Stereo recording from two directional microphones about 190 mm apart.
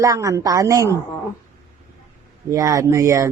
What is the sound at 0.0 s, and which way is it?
Speech, 15° right (ahead or behind).